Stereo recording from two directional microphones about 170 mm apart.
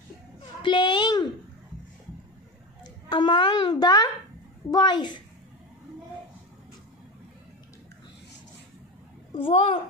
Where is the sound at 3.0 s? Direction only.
25° left (ahead or behind).